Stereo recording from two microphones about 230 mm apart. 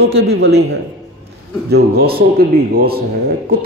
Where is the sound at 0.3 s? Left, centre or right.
Right.